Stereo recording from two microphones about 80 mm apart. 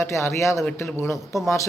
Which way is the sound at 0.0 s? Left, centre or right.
Left.